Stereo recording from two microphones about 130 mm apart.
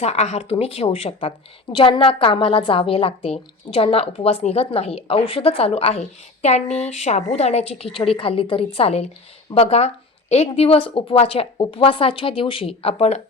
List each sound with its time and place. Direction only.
0.0 s a woman's voice: 60° left (ahead or behind)